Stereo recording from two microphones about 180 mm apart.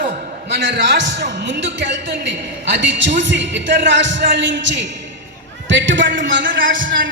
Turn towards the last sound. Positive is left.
turn(degrees=-90)